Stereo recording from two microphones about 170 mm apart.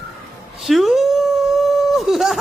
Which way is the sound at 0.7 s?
Centre (ahead or behind).